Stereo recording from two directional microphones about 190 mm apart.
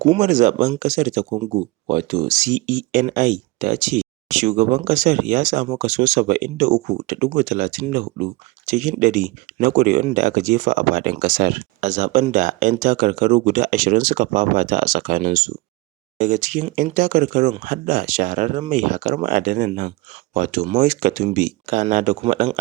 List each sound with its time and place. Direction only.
0.2 s speech: 40° right (ahead or behind)